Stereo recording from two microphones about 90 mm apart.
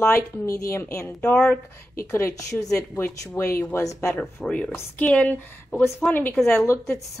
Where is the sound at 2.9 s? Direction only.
25° left (ahead or behind).